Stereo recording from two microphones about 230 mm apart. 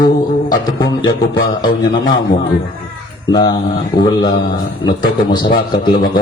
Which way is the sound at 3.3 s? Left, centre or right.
Centre.